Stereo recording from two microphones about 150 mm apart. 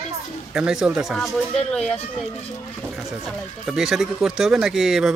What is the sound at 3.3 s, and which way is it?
Speech, 5° right (ahead or behind).